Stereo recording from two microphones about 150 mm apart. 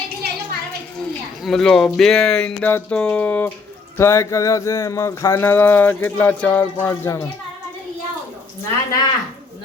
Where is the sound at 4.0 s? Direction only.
20° left (ahead or behind).